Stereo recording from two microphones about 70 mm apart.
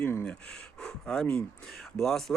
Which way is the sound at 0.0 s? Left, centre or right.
Left.